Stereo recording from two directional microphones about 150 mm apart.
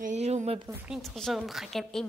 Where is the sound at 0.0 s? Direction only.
50° right (ahead or behind).